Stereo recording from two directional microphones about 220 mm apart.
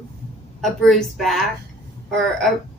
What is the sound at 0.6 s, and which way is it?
Speech, centre (ahead or behind).